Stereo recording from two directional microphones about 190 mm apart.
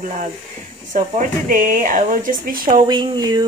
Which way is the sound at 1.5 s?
45° right (ahead or behind).